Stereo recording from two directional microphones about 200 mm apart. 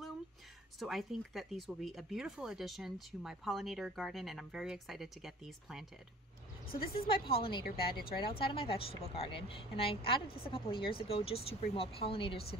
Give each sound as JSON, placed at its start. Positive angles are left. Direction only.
{"t": 0.7, "sound": "speech", "side_deg": 0}
{"t": 6.7, "sound": "a woman's voice", "side_deg": 50}
{"t": 7.2, "sound": "speech", "side_deg": 25}